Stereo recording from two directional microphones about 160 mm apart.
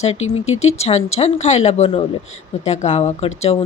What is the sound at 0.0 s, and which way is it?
Speech, 40° left (ahead or behind).